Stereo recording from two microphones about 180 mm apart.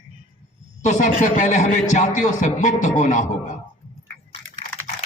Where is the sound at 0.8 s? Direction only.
45° left (ahead or behind).